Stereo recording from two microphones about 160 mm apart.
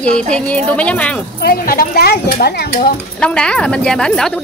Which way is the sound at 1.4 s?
70° left (ahead or behind).